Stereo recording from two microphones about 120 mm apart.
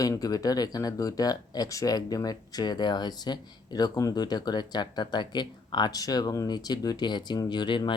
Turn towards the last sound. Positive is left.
turn(degrees=40)  # may be behind; listen again after turning